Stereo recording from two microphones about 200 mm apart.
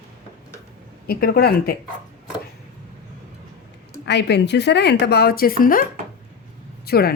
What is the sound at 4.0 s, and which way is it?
A woman's voice, 60° left (ahead or behind).